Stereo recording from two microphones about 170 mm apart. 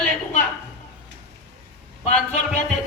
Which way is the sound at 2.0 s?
40° left (ahead or behind).